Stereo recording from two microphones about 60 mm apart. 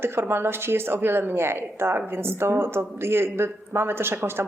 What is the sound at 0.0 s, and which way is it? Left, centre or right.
Speech, right.